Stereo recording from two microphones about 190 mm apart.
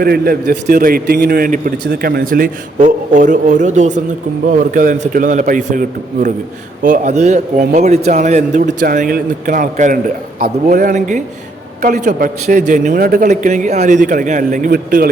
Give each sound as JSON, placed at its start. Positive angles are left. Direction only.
{"t": 0.0, "sound": "a man's voice", "side_deg": -55}